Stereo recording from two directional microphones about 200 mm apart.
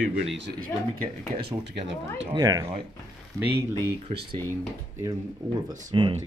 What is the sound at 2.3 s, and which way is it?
Speech, 20° right (ahead or behind).